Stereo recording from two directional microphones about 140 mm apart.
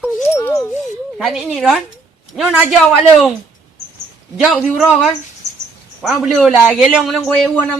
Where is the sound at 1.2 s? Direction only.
Centre (ahead or behind).